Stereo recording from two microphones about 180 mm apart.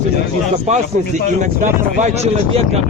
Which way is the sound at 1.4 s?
40° right (ahead or behind).